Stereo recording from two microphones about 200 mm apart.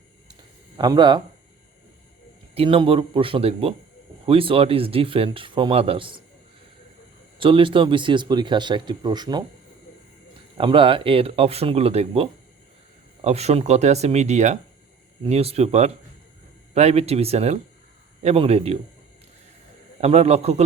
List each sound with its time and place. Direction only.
0.8 s speech: 20° right (ahead or behind)
2.6 s speech: 25° right (ahead or behind)
7.3 s speech: 25° right (ahead or behind)
10.6 s speech: 25° right (ahead or behind)
20.0 s speech: 30° right (ahead or behind)